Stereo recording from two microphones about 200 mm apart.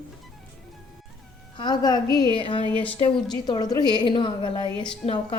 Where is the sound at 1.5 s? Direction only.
20° left (ahead or behind).